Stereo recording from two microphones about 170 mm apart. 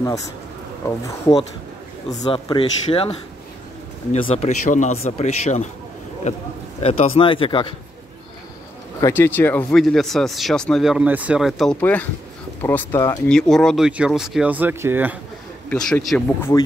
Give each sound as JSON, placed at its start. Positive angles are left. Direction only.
{"t": 0.8, "sound": "speech", "side_deg": 20}
{"t": 6.8, "sound": "speech", "side_deg": 35}
{"t": 9.0, "sound": "speech", "side_deg": 15}
{"t": 13.3, "sound": "speech", "side_deg": 5}
{"t": 15.7, "sound": "speech", "side_deg": 0}
{"t": 16.3, "sound": "speech", "side_deg": 15}